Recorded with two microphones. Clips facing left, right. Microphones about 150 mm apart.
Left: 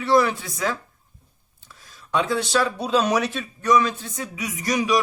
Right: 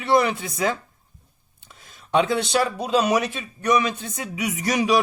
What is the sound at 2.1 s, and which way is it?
Speech, 20° right (ahead or behind).